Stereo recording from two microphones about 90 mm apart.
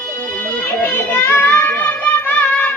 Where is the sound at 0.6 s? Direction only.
20° left (ahead or behind).